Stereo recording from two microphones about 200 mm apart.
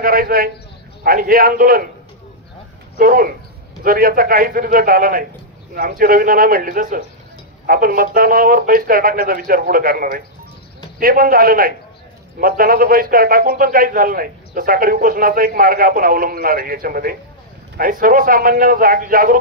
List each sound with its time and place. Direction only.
0.0 s a man's voice: 45° right (ahead or behind)
3.0 s a man's voice: 45° right (ahead or behind)